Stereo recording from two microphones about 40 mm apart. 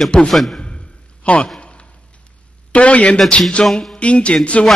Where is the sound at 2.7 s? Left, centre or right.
Left.